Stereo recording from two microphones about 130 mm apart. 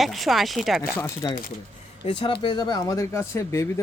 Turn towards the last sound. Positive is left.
turn(degrees=20)  # may be behind; listen again after turning